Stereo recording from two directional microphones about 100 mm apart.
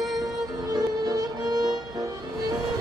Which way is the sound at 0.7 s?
40° right (ahead or behind).